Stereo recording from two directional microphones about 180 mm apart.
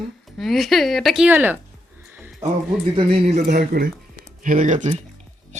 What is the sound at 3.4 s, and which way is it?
Speech, 60° right (ahead or behind).